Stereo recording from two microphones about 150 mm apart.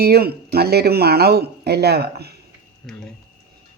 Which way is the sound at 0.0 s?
90° right.